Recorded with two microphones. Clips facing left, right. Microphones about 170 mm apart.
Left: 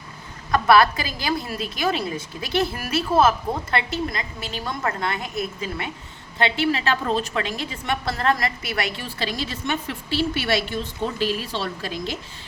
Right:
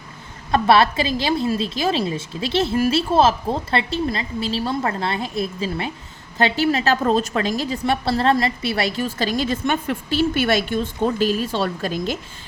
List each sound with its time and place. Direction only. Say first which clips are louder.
0.5 s a woman's voice: right 1 dB; 25° right (ahead or behind)
6.4 s a woman's voice: right 3 dB; 40° right (ahead or behind)